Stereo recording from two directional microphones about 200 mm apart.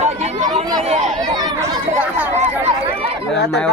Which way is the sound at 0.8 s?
30° right (ahead or behind).